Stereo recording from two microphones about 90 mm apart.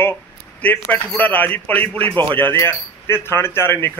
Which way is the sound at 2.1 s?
65° right (ahead or behind).